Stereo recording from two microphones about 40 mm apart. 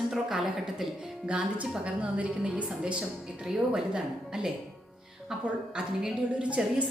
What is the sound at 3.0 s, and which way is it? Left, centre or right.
A woman's voice, centre.